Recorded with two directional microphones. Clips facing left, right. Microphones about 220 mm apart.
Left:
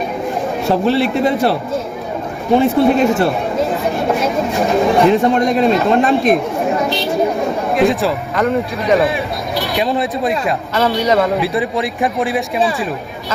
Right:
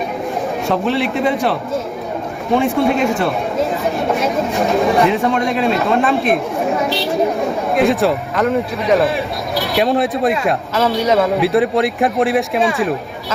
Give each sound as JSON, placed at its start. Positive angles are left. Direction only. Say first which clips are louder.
{"t": 0.7, "sound": "a man's voice", "louder": "left 4 dB", "side_deg": 35}
{"t": 2.5, "sound": "a woman's voice", "louder": "left 3 dB", "side_deg": 0}